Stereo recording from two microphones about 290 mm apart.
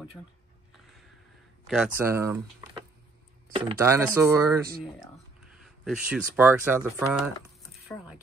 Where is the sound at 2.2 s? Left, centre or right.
Centre.